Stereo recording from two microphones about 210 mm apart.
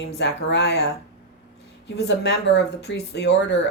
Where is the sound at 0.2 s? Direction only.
55° left (ahead or behind).